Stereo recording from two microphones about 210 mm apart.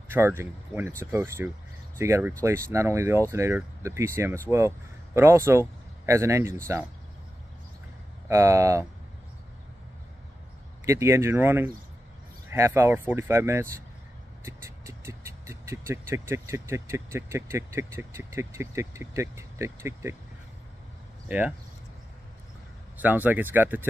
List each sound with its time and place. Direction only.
0.1 s speech: 10° right (ahead or behind)
8.3 s speech: 15° right (ahead or behind)
10.9 s speech: 15° right (ahead or behind)
21.3 s speech: 5° right (ahead or behind)
22.9 s speech: 10° right (ahead or behind)